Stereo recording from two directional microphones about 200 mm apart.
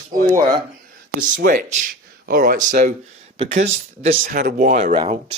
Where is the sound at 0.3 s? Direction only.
15° right (ahead or behind).